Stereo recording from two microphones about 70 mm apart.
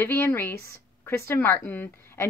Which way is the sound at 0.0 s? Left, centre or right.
Left.